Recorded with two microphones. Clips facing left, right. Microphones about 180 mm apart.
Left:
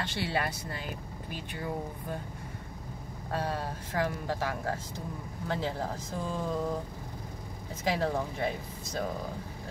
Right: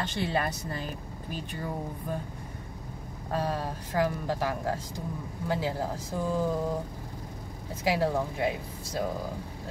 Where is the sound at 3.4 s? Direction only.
15° right (ahead or behind).